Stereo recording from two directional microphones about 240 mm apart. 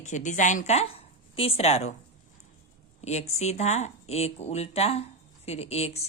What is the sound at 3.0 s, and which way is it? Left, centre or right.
A woman's voice, left.